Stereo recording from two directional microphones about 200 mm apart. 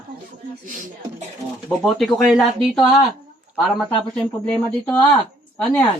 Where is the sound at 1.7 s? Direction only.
Centre (ahead or behind).